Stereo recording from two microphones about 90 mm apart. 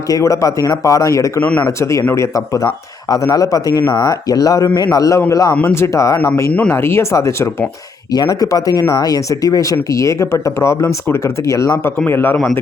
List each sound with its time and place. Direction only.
0.1 s speech: 40° left (ahead or behind)
1.4 s speech: 15° left (ahead or behind)
1.8 s speech: 35° left (ahead or behind)
6.5 s speech: 15° left (ahead or behind)
6.7 s speech: 30° left (ahead or behind)
8.1 s speech: 50° left (ahead or behind)
11.8 s a man's voice: 25° left (ahead or behind)